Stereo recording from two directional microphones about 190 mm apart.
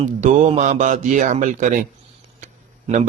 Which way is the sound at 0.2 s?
40° right (ahead or behind).